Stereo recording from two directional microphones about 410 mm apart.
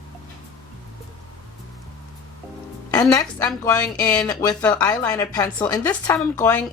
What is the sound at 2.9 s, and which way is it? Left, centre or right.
A woman's voice, centre.